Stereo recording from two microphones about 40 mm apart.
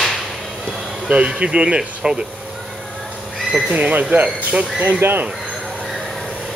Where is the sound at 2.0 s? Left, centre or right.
Centre.